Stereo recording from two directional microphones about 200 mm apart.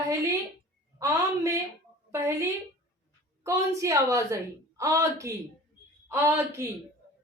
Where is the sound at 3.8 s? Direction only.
15° right (ahead or behind).